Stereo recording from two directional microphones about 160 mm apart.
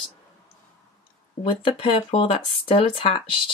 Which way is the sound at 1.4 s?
35° left (ahead or behind).